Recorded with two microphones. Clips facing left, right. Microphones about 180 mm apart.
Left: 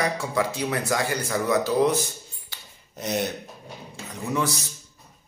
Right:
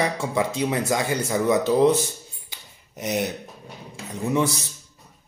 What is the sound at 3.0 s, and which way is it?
Speech, 10° right (ahead or behind).